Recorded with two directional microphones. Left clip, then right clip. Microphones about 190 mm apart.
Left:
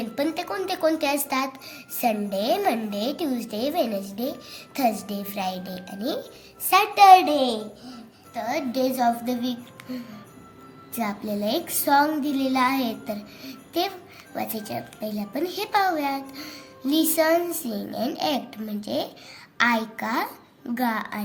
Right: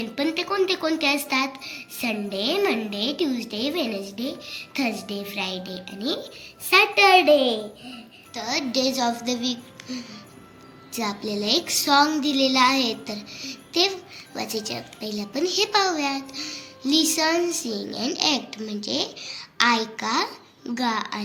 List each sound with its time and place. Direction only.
0.0 s a woman's voice: 45° left (ahead or behind)
8.8 s a woman's voice: 50° left (ahead or behind)
11.0 s a woman's voice: 50° left (ahead or behind)